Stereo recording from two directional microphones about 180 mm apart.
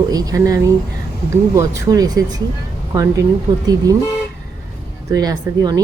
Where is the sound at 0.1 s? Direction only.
20° right (ahead or behind).